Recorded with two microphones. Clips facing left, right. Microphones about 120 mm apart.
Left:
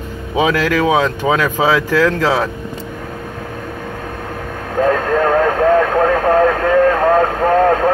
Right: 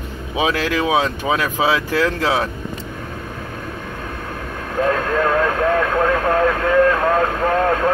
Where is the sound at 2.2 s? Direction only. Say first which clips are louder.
Left 3 dB; 40° left (ahead or behind).